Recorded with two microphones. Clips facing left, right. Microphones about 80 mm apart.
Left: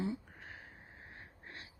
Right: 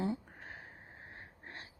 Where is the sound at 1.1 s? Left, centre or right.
Right.